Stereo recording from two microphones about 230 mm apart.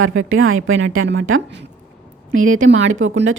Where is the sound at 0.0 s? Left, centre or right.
Right.